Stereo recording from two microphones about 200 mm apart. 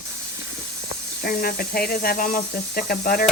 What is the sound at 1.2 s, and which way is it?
Speech, 50° left (ahead or behind).